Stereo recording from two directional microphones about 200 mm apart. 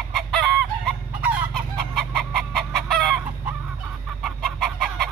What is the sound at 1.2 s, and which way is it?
Chicken, 5° right (ahead or behind).